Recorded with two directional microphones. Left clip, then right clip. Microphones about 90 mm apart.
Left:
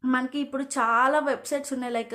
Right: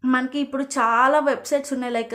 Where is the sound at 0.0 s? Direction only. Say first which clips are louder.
Right 4 dB; 30° right (ahead or behind).